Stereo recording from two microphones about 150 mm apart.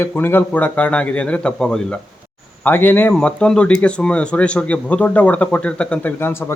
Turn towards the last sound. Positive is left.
turn(degrees=15)  # may be behind; listen again after turning